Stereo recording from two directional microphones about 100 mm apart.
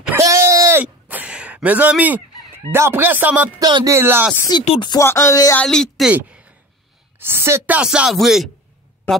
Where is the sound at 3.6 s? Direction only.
45° right (ahead or behind).